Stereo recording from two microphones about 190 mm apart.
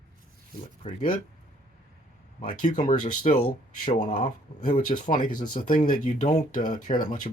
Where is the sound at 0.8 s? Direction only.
30° left (ahead or behind).